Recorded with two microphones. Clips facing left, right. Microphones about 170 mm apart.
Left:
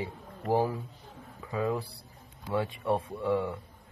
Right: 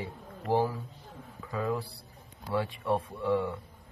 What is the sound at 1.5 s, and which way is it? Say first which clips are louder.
Speech: left 1 dB; 20° left (ahead or behind).